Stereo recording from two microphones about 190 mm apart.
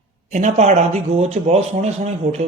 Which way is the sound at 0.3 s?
35° right (ahead or behind).